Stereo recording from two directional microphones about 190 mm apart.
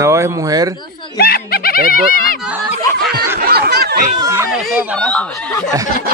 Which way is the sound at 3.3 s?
50° right (ahead or behind).